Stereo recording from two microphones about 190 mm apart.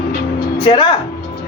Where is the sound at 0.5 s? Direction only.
25° left (ahead or behind).